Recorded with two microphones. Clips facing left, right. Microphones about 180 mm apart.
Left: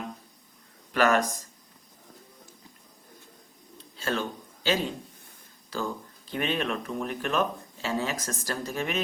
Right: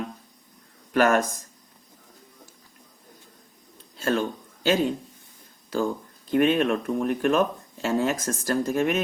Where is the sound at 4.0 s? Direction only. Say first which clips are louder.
Right 5 dB; 50° right (ahead or behind).